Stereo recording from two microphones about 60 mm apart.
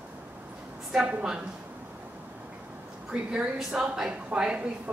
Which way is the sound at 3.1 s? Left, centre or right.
Centre.